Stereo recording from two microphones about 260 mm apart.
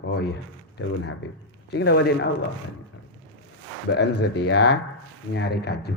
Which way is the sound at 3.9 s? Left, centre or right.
Left.